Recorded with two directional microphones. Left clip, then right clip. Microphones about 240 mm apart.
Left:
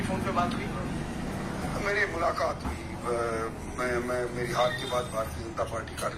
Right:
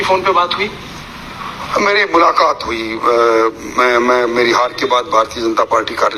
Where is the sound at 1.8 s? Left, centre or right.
Right.